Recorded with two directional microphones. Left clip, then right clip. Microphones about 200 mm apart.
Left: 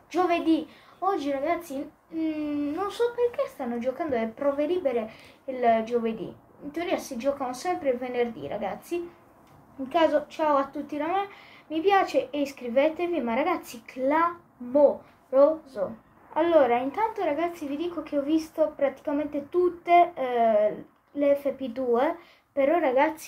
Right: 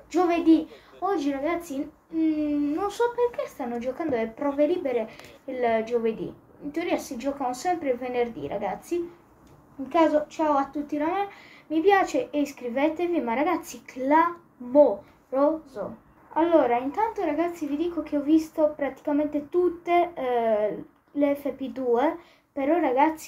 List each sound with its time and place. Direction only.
0.1 s a woman's voice: centre (ahead or behind)
1.1 s a woman's voice: 15° right (ahead or behind)
2.1 s a woman's voice: 5° right (ahead or behind)
9.8 s a woman's voice: centre (ahead or behind)